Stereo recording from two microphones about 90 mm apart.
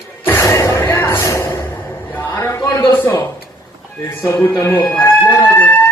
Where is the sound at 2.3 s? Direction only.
35° left (ahead or behind).